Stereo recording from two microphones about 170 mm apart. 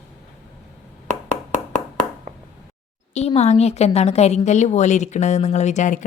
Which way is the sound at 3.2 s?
40° left (ahead or behind).